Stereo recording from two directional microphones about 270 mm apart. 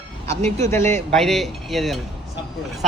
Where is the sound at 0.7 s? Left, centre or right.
Centre.